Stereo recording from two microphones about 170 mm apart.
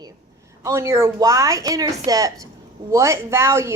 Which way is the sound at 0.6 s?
15° right (ahead or behind).